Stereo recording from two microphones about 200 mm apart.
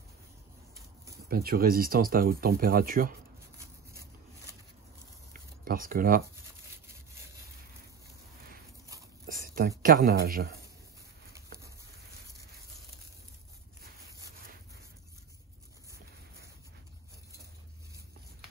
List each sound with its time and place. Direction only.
1.3 s speech: 50° right (ahead or behind)
5.7 s speech: 45° right (ahead or behind)
9.2 s speech: 45° right (ahead or behind)